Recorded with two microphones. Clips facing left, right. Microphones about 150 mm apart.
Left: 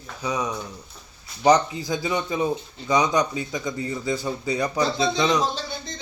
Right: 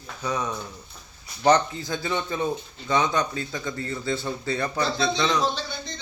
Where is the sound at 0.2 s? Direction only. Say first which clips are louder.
Left 1 dB; 10° left (ahead or behind).